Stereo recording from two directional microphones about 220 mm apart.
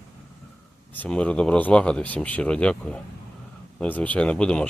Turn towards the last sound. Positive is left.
turn(degrees=5)  # may be behind; listen again after turning